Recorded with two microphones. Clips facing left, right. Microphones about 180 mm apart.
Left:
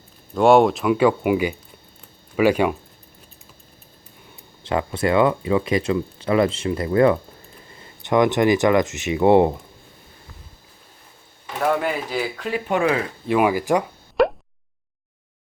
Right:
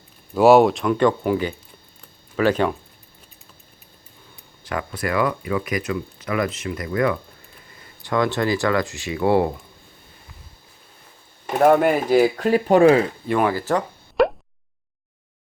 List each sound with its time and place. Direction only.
0.3 s speech: 5° right (ahead or behind)
4.6 s speech: 25° left (ahead or behind)
11.4 s speech: 50° right (ahead or behind); by 13.1 s 35° right (ahead or behind)
13.2 s speech: 5° left (ahead or behind)
14.2 s plop: centre (ahead or behind)